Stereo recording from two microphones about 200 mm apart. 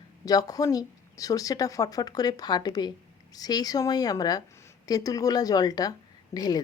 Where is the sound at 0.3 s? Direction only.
20° left (ahead or behind).